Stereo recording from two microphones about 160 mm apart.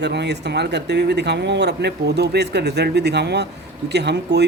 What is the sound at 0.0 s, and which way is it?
Speech, 90° right.